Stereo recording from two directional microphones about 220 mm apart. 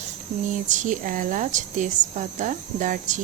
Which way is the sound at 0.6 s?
35° right (ahead or behind).